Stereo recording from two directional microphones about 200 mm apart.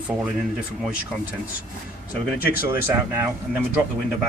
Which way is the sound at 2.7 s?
10° right (ahead or behind).